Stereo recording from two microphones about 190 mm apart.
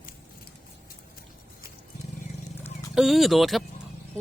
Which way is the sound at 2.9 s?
Centre (ahead or behind).